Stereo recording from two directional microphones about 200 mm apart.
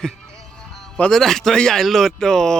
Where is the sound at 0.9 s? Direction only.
5° left (ahead or behind).